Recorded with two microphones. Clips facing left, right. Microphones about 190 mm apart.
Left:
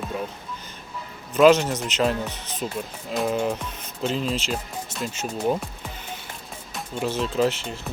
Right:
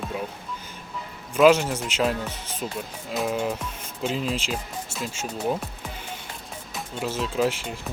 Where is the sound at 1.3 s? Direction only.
5° right (ahead or behind).